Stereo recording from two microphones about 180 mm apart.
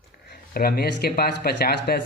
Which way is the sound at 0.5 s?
60° left (ahead or behind).